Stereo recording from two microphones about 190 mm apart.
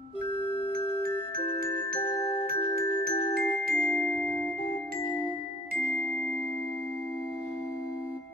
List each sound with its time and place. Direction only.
2.4 s glockenspiel: 50° right (ahead or behind)
3.6 s music: 5° right (ahead or behind)